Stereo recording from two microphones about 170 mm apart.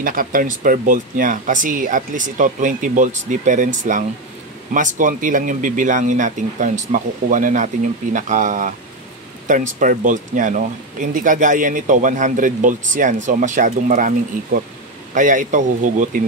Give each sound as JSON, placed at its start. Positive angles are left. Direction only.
{"t": 0.0, "sound": "speech", "side_deg": -55}